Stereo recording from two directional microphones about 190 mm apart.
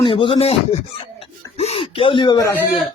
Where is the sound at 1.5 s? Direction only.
30° left (ahead or behind).